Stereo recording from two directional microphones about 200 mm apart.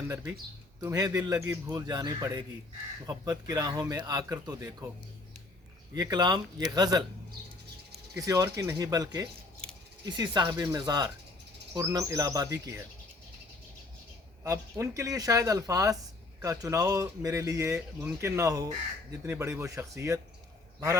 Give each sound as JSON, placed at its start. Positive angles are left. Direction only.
{"t": 0.1, "sound": "speech", "side_deg": -10}
{"t": 5.9, "sound": "speech", "side_deg": -20}
{"t": 8.2, "sound": "speech", "side_deg": -15}
{"t": 14.4, "sound": "speech", "side_deg": -15}